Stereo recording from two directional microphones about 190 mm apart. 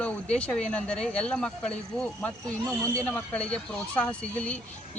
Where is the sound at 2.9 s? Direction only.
5° left (ahead or behind).